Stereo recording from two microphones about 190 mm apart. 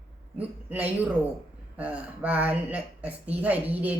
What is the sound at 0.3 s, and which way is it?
A woman's voice, 10° right (ahead or behind).